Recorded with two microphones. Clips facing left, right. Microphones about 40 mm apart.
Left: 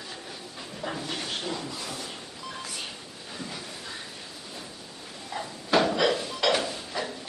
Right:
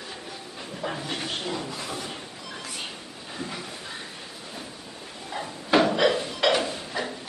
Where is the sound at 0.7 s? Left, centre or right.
Centre.